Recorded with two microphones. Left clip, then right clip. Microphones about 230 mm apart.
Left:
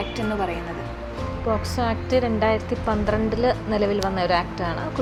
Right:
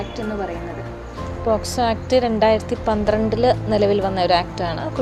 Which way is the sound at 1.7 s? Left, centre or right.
Centre.